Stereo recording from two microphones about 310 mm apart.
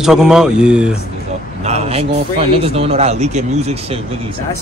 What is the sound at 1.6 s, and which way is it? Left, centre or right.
A man's voice, right.